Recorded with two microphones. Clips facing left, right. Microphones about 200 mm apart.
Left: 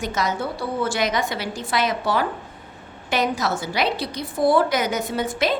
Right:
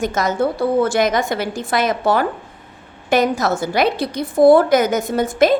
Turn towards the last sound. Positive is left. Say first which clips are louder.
# right 7 dB
turn(degrees=-45)  # may be behind; listen again after turning